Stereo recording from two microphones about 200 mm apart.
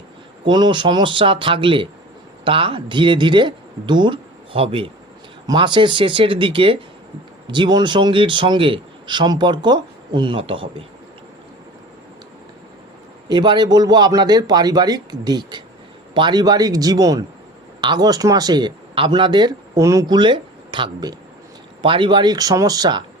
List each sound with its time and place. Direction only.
0.4 s speech: 25° right (ahead or behind)
13.2 s speech: 20° right (ahead or behind)